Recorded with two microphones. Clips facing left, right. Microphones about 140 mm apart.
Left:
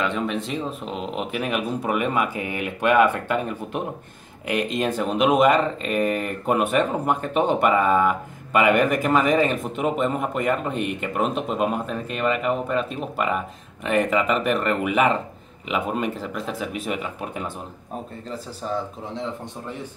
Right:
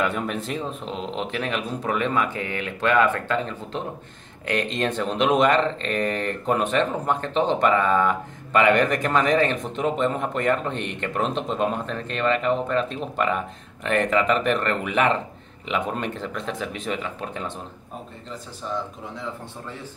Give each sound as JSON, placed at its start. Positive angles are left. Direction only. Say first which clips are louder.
{"t": 0.0, "sound": "speech", "louder": "left 1 dB", "side_deg": -5}
{"t": 18.6, "sound": "a man's voice", "louder": "left 2 dB", "side_deg": 35}